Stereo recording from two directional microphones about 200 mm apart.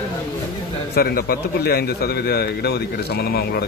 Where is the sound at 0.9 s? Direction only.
50° left (ahead or behind).